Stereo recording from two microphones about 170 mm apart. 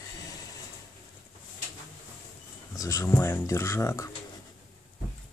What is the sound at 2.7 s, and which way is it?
Speech, 20° left (ahead or behind).